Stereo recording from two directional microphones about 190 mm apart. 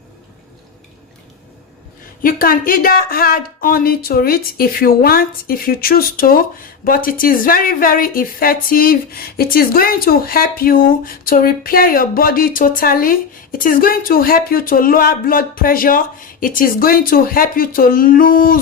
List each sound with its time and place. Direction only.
2.2 s speech: 50° left (ahead or behind)